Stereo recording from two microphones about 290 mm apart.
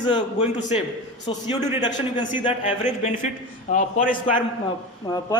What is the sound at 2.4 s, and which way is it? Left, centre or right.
A man's voice, left.